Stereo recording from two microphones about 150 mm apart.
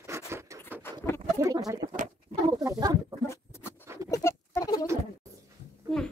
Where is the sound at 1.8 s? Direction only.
50° right (ahead or behind).